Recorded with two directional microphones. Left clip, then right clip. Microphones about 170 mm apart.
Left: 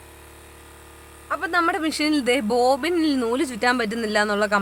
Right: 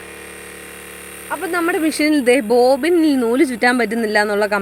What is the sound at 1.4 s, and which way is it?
Speech, 20° right (ahead or behind).